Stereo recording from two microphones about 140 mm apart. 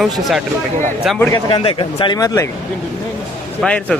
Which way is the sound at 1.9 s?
30° left (ahead or behind).